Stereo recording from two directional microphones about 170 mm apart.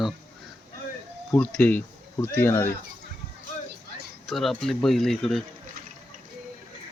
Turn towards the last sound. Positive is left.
turn(degrees=0)  # may be behind; listen again after turning